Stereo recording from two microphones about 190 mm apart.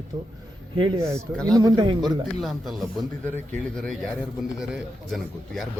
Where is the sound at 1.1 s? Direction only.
5° left (ahead or behind).